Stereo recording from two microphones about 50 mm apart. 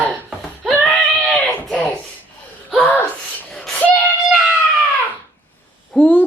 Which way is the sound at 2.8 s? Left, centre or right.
Left.